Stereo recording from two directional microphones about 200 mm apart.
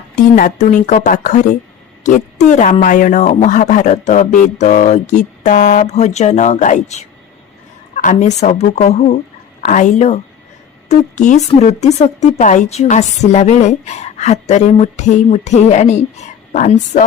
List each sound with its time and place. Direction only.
0.3 s speech: 40° left (ahead or behind)